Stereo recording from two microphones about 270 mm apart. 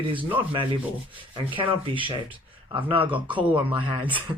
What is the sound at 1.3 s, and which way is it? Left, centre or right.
Speech, centre.